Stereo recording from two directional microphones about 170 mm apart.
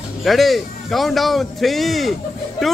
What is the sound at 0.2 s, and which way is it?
Speech, centre (ahead or behind).